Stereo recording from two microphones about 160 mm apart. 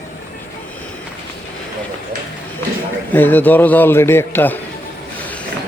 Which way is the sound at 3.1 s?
10° left (ahead or behind).